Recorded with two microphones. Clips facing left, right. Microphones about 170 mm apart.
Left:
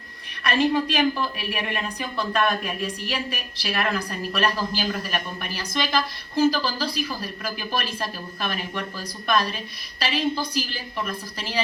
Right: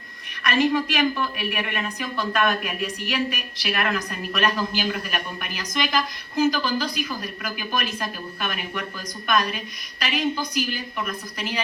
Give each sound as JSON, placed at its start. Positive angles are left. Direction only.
{"t": 0.4, "sound": "a woman's voice", "side_deg": 30}